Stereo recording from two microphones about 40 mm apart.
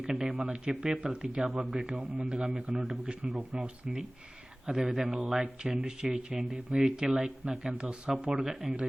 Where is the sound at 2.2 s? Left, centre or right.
Right.